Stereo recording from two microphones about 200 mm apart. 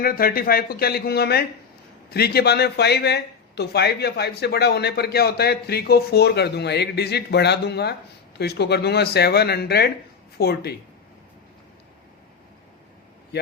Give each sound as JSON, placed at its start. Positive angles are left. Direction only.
{"t": 0.0, "sound": "speech", "side_deg": 45}